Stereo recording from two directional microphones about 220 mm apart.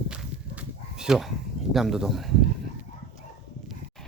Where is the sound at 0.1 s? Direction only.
5° right (ahead or behind).